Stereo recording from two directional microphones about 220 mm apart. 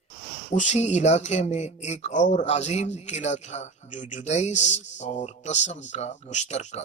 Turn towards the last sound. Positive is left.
turn(degrees=30)  # may be behind; listen again after turning